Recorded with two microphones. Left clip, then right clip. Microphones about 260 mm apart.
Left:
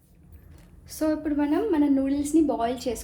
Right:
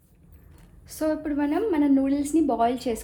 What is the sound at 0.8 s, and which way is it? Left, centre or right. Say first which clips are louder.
A woman's voice: even; right.